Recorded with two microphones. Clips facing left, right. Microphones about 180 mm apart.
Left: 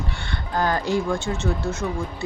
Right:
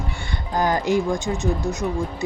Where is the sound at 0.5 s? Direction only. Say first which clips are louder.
Right 2 dB; 20° right (ahead or behind).